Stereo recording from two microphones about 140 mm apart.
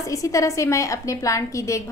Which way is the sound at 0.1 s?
25° left (ahead or behind).